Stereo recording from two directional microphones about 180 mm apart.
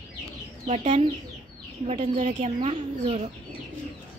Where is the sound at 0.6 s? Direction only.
40° right (ahead or behind).